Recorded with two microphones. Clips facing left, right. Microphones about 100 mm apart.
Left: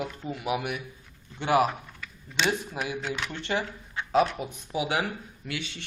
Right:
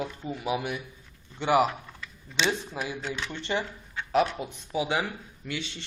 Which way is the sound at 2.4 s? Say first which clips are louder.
Left 1 dB; 15° left (ahead or behind).